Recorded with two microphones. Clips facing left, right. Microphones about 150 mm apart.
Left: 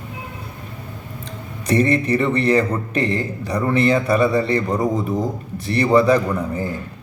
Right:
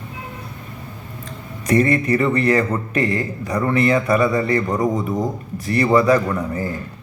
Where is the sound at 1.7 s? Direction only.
30° left (ahead or behind).